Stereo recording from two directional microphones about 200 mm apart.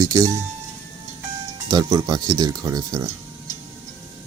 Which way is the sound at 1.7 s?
15° right (ahead or behind).